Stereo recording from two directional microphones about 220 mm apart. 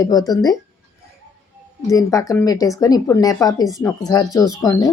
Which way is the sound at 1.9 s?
15° left (ahead or behind).